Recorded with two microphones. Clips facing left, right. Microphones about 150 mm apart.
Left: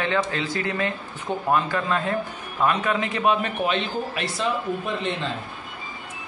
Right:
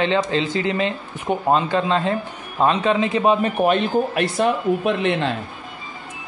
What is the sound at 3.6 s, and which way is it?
Speech, 50° right (ahead or behind).